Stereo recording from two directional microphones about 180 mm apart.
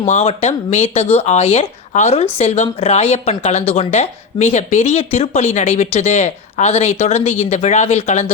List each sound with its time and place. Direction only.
0.0 s speech: 35° left (ahead or behind)